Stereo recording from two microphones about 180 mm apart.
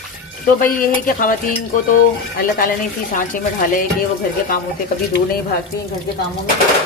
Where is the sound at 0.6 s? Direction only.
50° left (ahead or behind).